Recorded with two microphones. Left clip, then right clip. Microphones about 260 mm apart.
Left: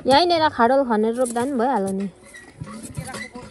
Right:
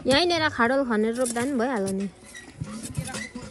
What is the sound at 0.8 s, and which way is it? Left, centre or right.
Speech, left.